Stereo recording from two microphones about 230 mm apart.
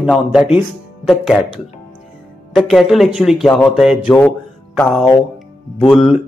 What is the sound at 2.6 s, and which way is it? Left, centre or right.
Speech, centre.